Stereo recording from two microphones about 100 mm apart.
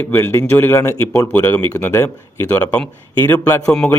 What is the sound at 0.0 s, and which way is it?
Speech, 25° left (ahead or behind).